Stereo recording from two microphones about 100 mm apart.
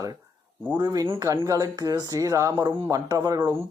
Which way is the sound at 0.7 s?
45° right (ahead or behind).